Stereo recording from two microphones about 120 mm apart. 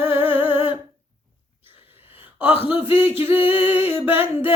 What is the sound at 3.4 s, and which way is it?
Music, 50° left (ahead or behind).